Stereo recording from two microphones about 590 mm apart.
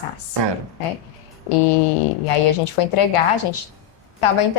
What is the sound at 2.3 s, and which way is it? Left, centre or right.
Speech, left.